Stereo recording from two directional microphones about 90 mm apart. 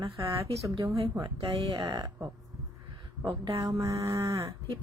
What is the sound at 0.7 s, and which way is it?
Speech, 80° right.